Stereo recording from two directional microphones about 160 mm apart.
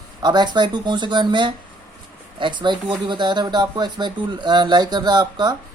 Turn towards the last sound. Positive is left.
turn(degrees=-25)  # may be behind; listen again after turning